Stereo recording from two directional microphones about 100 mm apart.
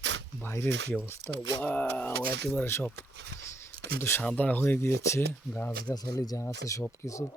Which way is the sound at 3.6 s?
25° left (ahead or behind).